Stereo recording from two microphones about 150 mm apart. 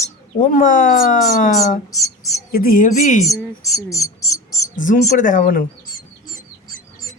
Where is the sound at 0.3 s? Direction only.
60° left (ahead or behind).